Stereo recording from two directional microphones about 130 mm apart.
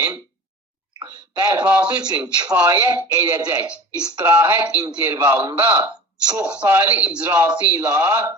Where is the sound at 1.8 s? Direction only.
35° right (ahead or behind).